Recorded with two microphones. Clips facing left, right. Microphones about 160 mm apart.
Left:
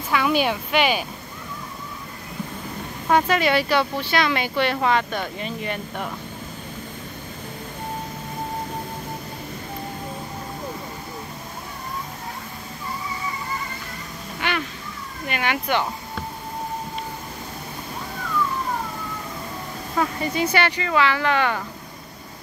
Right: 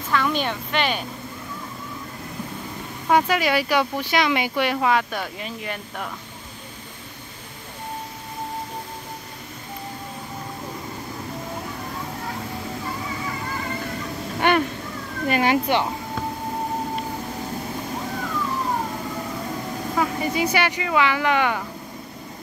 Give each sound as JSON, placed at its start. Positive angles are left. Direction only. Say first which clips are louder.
{"t": 0.1, "sound": "speech", "louder": "left 2 dB", "side_deg": 10}
{"t": 3.1, "sound": "speech", "louder": "even", "side_deg": -10}
{"t": 14.4, "sound": "a sound", "louder": "right 7 dB", "side_deg": -50}
{"t": 15.2, "sound": "speech", "louder": "right 5 dB", "side_deg": -35}
{"t": 20.0, "sound": "speech", "louder": "even", "side_deg": -10}